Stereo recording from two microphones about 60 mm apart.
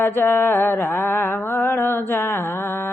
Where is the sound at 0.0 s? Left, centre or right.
Left.